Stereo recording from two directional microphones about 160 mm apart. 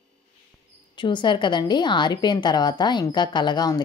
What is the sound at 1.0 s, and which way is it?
A woman's voice, 30° left (ahead or behind).